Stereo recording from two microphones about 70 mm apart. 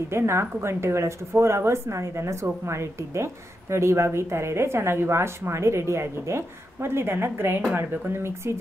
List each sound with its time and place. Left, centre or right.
0.1 s speech: right